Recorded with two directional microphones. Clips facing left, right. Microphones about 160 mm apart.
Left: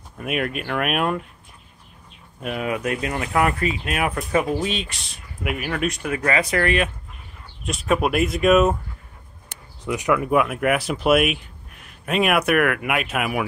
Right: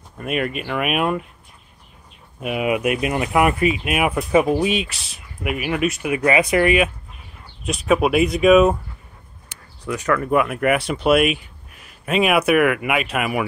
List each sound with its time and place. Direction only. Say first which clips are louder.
0.2 s speech: right 2 dB; centre (ahead or behind)
2.4 s speech: right 4 dB; 10° right (ahead or behind)
6.1 s speech: right 5 dB; 15° right (ahead or behind); by 8.7 s centre (ahead or behind)
9.8 s speech: even; 15° left (ahead or behind)
10.3 s speech: right 4 dB; centre (ahead or behind)